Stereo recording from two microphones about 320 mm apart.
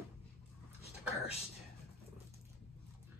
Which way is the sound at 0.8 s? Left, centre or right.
Centre.